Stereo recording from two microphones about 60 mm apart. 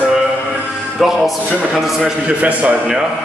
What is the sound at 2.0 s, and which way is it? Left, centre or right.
Speech, centre.